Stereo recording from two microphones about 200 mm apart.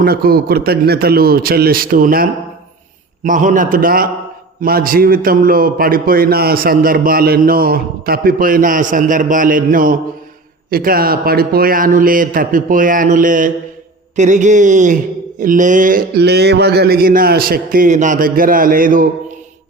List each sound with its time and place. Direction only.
0.0 s a man's voice: 50° right (ahead or behind)